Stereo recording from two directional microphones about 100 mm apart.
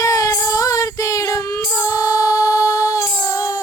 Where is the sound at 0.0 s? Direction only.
35° left (ahead or behind).